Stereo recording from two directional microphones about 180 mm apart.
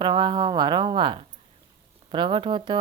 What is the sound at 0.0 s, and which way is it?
Speech, 25° right (ahead or behind).